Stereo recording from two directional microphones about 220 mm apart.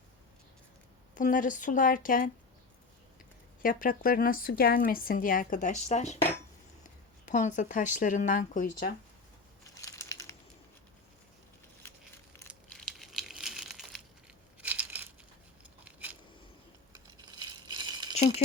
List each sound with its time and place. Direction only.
1.1 s speech: 35° left (ahead or behind)
3.6 s speech: 40° left (ahead or behind)
9.8 s crumpling: 15° left (ahead or behind)
12.6 s crumpling: centre (ahead or behind)
14.6 s crushing: 5° right (ahead or behind)
15.8 s a sound: 5° right (ahead or behind)
17.4 s rattle: 20° right (ahead or behind)
18.1 s rattle: 30° left (ahead or behind)